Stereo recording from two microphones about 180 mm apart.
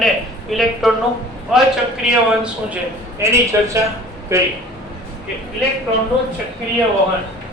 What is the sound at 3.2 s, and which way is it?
A woman's voice, 15° right (ahead or behind).